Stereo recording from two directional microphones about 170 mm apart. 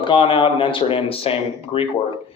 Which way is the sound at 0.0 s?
30° left (ahead or behind).